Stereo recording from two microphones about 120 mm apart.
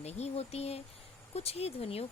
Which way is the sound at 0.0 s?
60° left (ahead or behind).